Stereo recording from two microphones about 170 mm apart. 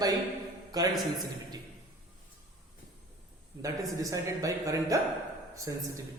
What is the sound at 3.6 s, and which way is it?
A man's voice, 20° right (ahead or behind).